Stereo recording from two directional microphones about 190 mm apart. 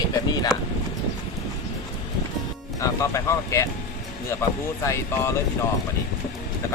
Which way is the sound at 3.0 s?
15° left (ahead or behind).